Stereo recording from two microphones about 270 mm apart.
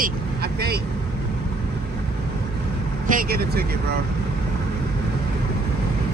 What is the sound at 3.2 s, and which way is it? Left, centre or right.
Speech, right.